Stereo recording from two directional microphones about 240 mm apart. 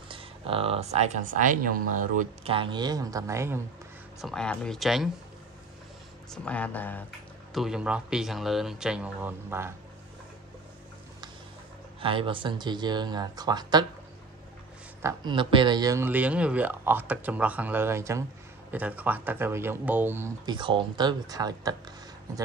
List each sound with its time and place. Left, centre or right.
0.1 s speech: right
4.2 s speech: centre
6.3 s speech: centre
12.0 s speech: right
15.0 s speech: centre